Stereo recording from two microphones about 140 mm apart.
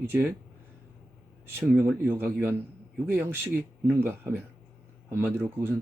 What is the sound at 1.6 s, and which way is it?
A man's voice, 15° right (ahead or behind).